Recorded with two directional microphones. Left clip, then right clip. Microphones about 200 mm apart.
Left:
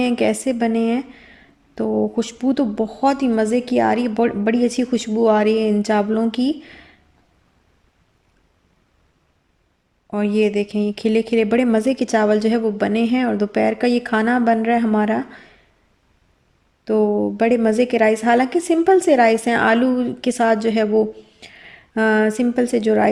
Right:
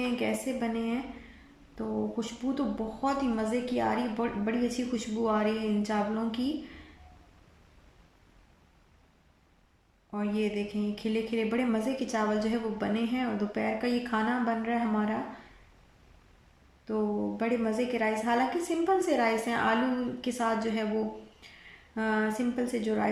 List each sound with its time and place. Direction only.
0.0 s speech: 50° left (ahead or behind)
10.1 s speech: 50° left (ahead or behind)
16.8 s speech: 45° left (ahead or behind)
21.4 s a sound: 45° left (ahead or behind)
21.9 s speech: 50° left (ahead or behind)